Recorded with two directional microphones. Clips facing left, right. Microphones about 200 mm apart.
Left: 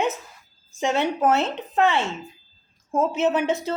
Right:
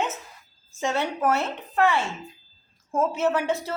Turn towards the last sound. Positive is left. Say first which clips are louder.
# left 2 dB
turn(degrees=20)  # may be behind; listen again after turning